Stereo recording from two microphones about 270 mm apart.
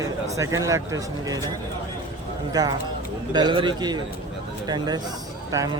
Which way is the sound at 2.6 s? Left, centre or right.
Centre.